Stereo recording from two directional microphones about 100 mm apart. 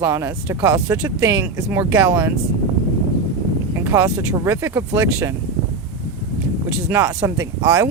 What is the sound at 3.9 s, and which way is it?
Speech, 30° right (ahead or behind).